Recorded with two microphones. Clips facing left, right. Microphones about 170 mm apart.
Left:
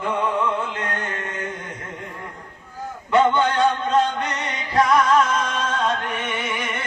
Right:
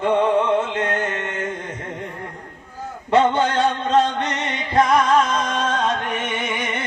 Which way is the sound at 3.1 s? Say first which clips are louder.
Right 1 dB; 30° right (ahead or behind).